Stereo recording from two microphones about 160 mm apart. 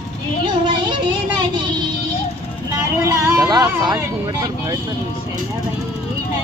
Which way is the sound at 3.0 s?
20° right (ahead or behind).